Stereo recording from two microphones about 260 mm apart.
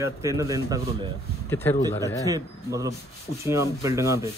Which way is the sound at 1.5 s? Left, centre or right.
Centre.